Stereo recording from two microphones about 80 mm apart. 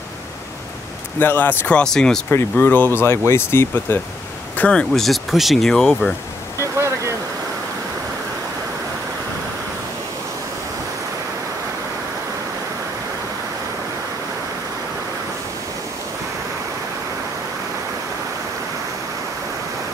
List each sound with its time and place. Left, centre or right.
1.2 s speech: left
1.7 s speech: centre
2.5 s speech: left
4.6 s speech: centre
4.9 s speech: centre
6.6 s a sound: right